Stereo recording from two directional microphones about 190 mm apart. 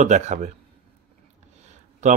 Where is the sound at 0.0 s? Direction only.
40° right (ahead or behind).